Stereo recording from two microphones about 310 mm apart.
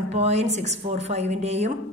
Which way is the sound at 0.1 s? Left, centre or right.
Right.